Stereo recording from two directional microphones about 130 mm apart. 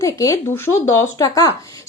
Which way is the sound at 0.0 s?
25° left (ahead or behind).